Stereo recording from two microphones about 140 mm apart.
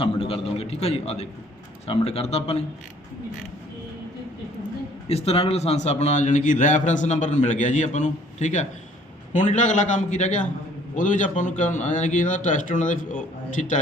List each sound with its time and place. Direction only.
0.0 s a man's voice: 40° left (ahead or behind)
5.0 s a man's voice: 50° left (ahead or behind)